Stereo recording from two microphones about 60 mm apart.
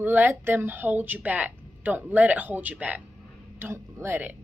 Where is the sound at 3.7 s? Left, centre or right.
Right.